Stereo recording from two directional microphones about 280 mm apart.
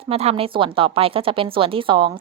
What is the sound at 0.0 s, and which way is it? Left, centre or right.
A woman's voice, right.